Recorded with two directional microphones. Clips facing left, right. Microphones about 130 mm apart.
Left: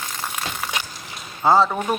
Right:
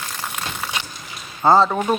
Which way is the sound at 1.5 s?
Centre (ahead or behind).